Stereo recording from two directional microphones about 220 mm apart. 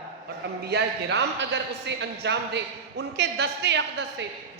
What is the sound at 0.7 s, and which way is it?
A man's voice, 50° right (ahead or behind).